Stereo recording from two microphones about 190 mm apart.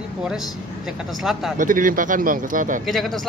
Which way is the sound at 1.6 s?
45° right (ahead or behind).